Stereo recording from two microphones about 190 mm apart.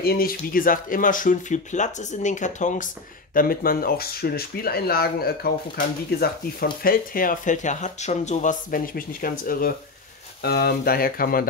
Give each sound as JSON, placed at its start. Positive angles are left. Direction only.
{"t": 0.0, "sound": "speech", "side_deg": 50}